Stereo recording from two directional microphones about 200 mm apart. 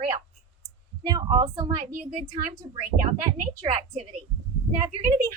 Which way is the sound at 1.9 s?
35° right (ahead or behind).